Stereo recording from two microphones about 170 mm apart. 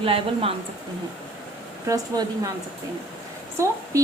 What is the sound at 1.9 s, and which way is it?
Speech, 20° right (ahead or behind).